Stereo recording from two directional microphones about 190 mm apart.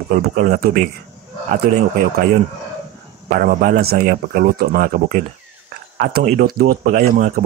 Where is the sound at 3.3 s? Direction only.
50° right (ahead or behind).